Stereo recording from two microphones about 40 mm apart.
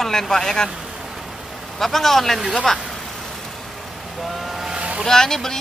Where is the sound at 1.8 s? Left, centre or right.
Centre.